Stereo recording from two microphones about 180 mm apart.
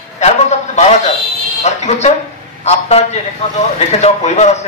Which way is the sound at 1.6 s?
40° left (ahead or behind).